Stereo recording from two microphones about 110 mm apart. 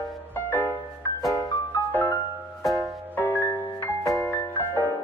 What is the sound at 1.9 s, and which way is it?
Music, 20° left (ahead or behind).